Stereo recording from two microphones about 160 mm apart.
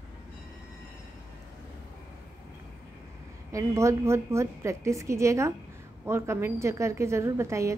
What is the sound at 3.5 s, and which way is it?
A woman's voice, 20° right (ahead or behind).